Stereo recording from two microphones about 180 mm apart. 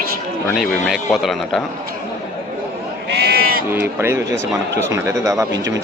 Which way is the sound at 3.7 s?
10° right (ahead or behind).